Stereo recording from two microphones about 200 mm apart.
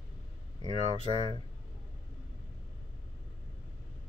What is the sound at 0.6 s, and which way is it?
Speech, 25° right (ahead or behind).